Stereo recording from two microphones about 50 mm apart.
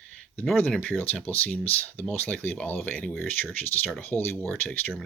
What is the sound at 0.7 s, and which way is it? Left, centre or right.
Speech, left.